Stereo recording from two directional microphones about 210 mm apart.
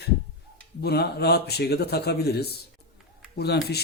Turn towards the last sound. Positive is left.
turn(degrees=50)  # may be behind; listen again after turning